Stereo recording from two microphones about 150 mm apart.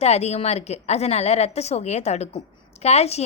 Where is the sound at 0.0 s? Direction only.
45° left (ahead or behind).